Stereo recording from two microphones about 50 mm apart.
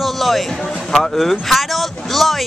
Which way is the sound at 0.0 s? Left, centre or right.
Centre.